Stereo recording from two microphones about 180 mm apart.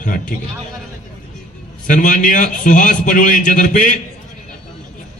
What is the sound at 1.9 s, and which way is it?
A man's voice, 45° left (ahead or behind).